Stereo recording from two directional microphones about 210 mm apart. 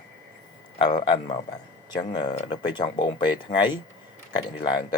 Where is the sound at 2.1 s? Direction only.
20° left (ahead or behind).